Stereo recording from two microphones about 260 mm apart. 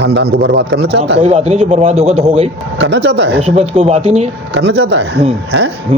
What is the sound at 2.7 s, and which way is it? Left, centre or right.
Speech, right.